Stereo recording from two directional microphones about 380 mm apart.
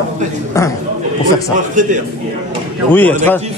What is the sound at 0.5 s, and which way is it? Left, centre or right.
Speech, centre.